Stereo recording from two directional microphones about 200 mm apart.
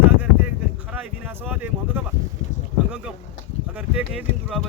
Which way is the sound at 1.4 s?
10° right (ahead or behind).